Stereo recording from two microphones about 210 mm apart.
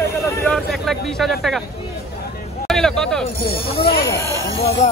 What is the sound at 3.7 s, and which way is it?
Speech, 15° left (ahead or behind).